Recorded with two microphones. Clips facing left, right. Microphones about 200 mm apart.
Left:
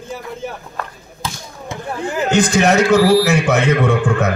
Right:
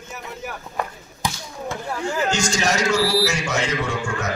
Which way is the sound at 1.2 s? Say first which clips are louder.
Right 1 dB; 15° right (ahead or behind).